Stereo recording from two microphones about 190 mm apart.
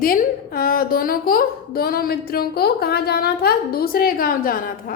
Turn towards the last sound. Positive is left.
turn(degrees=50)  # may be behind; listen again after turning